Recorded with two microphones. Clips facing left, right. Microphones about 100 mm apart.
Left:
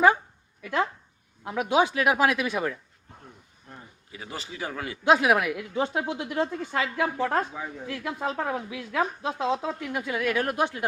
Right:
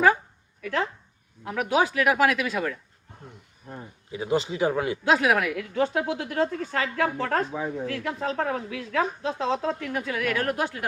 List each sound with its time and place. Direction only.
1.5 s speech: 20° left (ahead or behind)
4.1 s speech: 20° right (ahead or behind)
5.1 s a woman's voice: 15° left (ahead or behind)
7.5 s speech: 25° right (ahead or behind)
7.9 s a woman's voice: 10° left (ahead or behind)
9.8 s speech: 20° left (ahead or behind)